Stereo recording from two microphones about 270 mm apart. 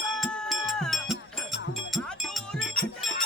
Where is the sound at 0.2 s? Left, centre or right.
Centre.